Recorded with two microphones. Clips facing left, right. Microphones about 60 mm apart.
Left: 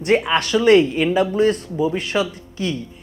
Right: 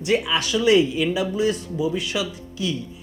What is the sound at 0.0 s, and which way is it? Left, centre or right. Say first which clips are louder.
Speech: left 4 dB; left.